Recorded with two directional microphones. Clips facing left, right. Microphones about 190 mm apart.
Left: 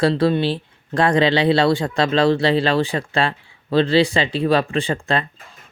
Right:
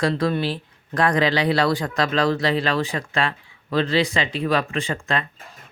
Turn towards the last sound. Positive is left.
turn(degrees=30)  # may be behind; listen again after turning